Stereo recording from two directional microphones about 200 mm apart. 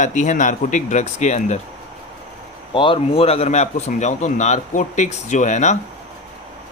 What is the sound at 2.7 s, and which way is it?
Speech, 25° left (ahead or behind).